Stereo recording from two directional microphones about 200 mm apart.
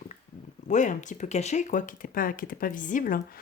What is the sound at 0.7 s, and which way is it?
Speech, 40° left (ahead or behind).